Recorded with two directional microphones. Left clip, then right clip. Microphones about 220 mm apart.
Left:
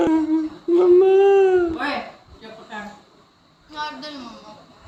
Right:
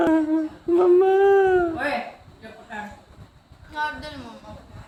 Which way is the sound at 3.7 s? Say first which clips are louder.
Right 2 dB; 25° right (ahead or behind).